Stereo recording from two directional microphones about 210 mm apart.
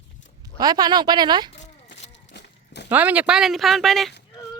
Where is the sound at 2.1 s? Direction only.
55° left (ahead or behind).